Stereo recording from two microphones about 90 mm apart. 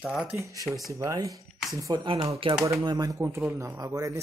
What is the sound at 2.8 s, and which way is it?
Speech, 55° right (ahead or behind).